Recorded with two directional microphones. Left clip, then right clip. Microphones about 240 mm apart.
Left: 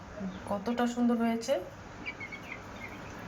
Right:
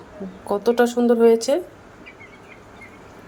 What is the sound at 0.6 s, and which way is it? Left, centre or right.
Speech, right.